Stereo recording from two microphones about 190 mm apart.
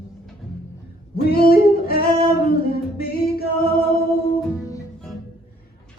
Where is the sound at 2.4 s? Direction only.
50° left (ahead or behind).